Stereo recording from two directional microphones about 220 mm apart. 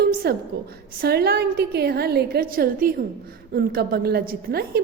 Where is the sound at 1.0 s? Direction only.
45° right (ahead or behind).